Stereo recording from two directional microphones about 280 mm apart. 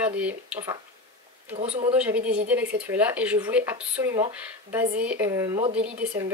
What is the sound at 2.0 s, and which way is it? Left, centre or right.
Speech, centre.